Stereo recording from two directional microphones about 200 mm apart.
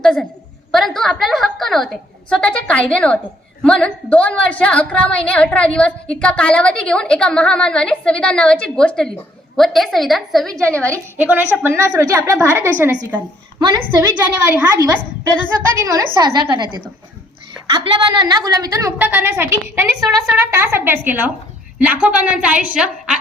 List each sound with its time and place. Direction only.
0.0 s a woman's voice: centre (ahead or behind)
10.9 s a woman's voice: 10° right (ahead or behind)
13.6 s a woman's voice: 20° right (ahead or behind)
14.3 s a woman's voice: 10° right (ahead or behind)
15.8 s a woman's voice: 20° right (ahead or behind)
17.7 s a woman's voice: 20° right (ahead or behind)
20.0 s a woman's voice: centre (ahead or behind)
20.3 s a woman's voice: 15° right (ahead or behind)